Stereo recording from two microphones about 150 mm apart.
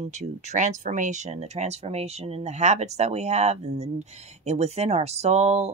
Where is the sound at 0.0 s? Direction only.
50° right (ahead or behind).